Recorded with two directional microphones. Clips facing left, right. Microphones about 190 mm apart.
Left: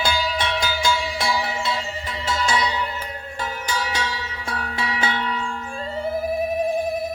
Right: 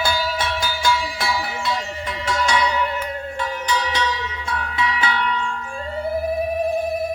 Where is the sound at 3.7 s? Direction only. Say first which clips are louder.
Right 4 dB; 40° left (ahead or behind).